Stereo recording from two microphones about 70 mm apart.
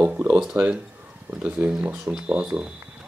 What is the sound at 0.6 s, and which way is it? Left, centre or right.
Speech, right.